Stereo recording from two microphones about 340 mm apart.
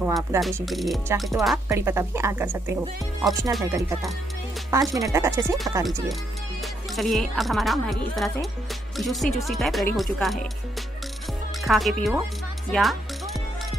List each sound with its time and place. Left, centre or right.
0.0 s speech: centre
11.6 s speech: centre
12.7 s music: centre